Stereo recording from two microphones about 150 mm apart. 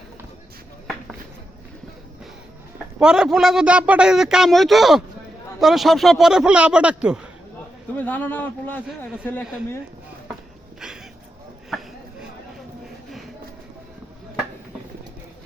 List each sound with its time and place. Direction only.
2.7 s a man's voice: 5° right (ahead or behind)
7.9 s a man's voice: 10° left (ahead or behind)